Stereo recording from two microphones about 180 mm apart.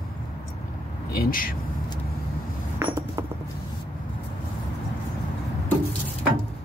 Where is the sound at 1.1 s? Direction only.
55° left (ahead or behind).